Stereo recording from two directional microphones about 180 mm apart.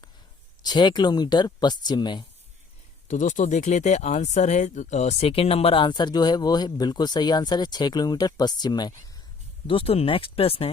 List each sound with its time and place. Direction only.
0.6 s speech: 25° left (ahead or behind)
3.1 s speech: 45° left (ahead or behind)